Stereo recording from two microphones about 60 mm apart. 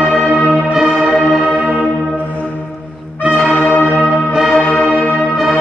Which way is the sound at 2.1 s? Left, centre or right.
Left.